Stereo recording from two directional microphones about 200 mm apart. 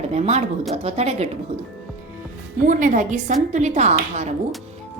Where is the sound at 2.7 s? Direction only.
40° right (ahead or behind).